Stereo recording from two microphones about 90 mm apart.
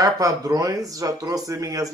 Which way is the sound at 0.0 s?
40° right (ahead or behind).